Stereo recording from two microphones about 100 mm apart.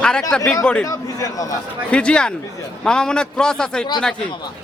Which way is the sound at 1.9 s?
10° left (ahead or behind).